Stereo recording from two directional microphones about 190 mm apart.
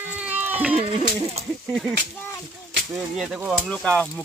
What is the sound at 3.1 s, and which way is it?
Speech, 5° right (ahead or behind).